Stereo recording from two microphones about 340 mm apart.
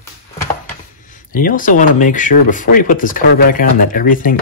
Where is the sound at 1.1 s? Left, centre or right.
Left.